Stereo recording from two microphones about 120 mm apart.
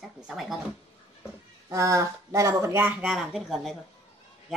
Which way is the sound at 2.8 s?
10° right (ahead or behind).